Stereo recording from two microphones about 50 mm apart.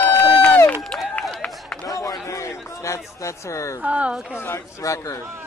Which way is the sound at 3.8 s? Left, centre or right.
Right.